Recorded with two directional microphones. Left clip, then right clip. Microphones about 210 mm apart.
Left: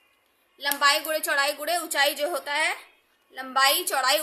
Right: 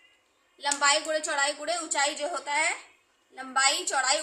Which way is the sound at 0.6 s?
35° left (ahead or behind).